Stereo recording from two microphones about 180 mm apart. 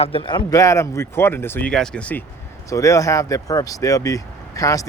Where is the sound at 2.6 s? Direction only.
20° left (ahead or behind).